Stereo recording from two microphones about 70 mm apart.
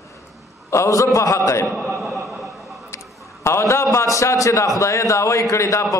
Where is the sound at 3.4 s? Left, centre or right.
Left.